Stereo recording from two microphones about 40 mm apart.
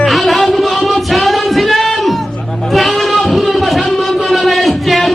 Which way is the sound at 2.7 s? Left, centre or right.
Centre.